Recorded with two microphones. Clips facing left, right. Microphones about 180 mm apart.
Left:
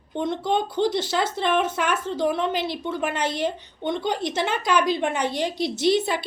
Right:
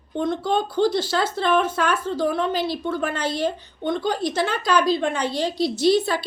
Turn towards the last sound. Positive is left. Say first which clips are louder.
# right 2 dB
turn(degrees=20)  # may be behind; listen again after turning